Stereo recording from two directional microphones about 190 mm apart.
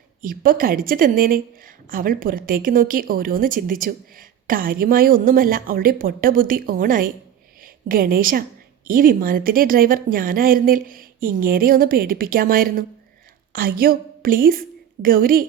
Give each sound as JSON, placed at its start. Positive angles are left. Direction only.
{"t": 0.2, "sound": "a woman's voice", "side_deg": -50}